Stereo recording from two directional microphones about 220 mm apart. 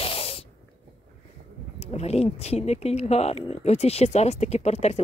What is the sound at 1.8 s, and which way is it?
Speech, 30° left (ahead or behind).